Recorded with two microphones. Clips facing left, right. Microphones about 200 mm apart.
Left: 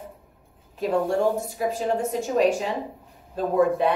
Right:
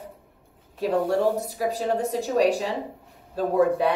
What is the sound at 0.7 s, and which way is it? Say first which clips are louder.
A woman's voice: even; 35° right (ahead or behind).